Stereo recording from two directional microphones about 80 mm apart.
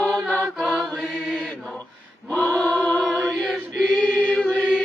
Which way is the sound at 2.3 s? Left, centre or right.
Centre.